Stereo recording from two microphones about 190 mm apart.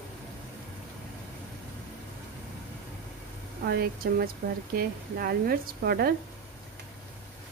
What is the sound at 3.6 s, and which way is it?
Speech, 55° right (ahead or behind).